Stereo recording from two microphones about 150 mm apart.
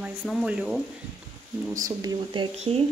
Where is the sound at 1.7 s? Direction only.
25° right (ahead or behind).